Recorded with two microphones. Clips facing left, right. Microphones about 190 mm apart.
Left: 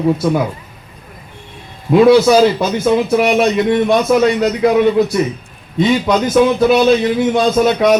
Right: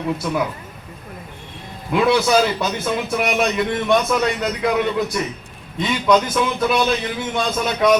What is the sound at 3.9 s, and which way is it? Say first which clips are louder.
Speech: left 6 dB; 45° left (ahead or behind).